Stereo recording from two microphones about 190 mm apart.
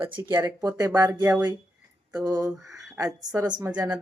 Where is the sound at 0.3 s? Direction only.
20° right (ahead or behind).